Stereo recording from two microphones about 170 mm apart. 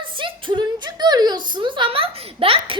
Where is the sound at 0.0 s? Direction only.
30° right (ahead or behind).